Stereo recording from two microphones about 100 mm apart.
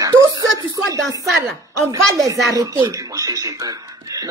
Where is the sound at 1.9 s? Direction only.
35° right (ahead or behind).